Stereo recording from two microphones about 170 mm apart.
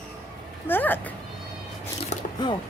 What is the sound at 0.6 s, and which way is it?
Speech, 10° left (ahead or behind).